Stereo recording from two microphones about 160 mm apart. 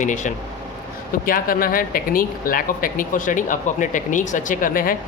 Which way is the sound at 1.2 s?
65° left (ahead or behind).